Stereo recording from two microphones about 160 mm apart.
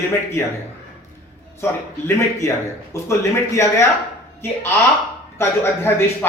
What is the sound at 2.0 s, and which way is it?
A man's voice, 20° left (ahead or behind).